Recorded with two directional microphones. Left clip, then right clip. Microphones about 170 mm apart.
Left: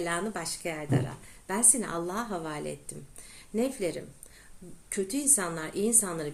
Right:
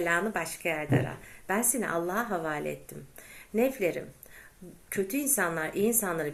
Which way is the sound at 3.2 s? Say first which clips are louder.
Right 3 dB; 30° left (ahead or behind).